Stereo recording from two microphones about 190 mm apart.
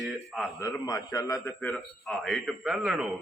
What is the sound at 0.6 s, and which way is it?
Speech, 20° left (ahead or behind).